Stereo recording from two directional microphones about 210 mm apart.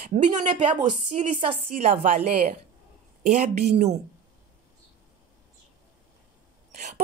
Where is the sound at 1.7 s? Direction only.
40° right (ahead or behind).